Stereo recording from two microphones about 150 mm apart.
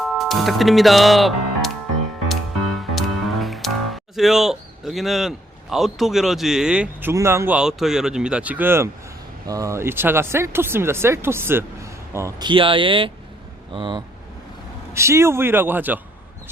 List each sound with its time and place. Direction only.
0.0 s speech: centre (ahead or behind)
2.3 s music: centre (ahead or behind)
5.7 s speech: centre (ahead or behind)
7.1 s speech: 20° right (ahead or behind)
12.5 s speech: 35° right (ahead or behind)
14.9 s speech: 20° right (ahead or behind)